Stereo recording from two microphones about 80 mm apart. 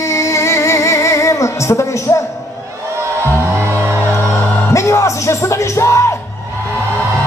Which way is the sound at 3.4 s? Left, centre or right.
Right.